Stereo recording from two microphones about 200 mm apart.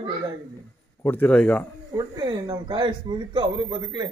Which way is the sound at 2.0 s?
20° right (ahead or behind).